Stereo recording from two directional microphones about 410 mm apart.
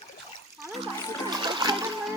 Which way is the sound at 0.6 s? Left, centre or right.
Centre.